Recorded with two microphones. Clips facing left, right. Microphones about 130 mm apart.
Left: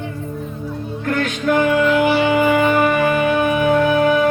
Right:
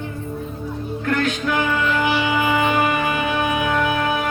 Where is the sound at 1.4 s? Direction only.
50° left (ahead or behind).